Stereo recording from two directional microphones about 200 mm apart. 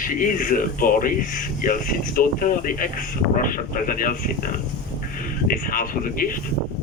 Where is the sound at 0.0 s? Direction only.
45° left (ahead or behind).